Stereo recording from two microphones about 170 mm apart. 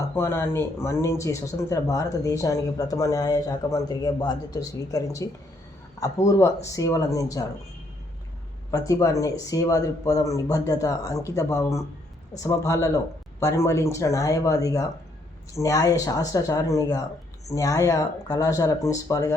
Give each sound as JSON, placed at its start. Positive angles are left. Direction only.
{"t": 0.1, "sound": "speech", "side_deg": 15}
{"t": 8.7, "sound": "speech", "side_deg": 20}